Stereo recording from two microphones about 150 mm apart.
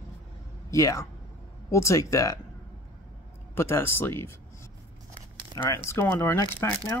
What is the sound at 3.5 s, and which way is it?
Speech, 15° left (ahead or behind).